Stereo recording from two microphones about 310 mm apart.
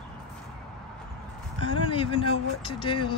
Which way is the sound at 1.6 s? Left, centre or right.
Centre.